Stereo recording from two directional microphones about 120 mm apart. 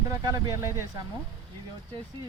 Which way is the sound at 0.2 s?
30° right (ahead or behind).